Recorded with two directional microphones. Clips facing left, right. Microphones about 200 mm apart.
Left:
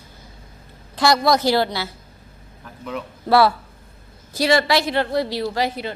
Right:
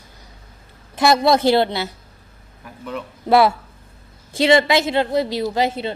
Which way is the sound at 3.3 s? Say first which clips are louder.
Right 1 dB; 20° right (ahead or behind).